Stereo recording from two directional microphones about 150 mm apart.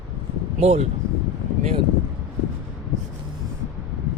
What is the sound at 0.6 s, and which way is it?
Speech, 45° right (ahead or behind).